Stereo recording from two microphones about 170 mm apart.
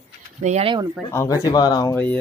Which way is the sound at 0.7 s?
20° right (ahead or behind).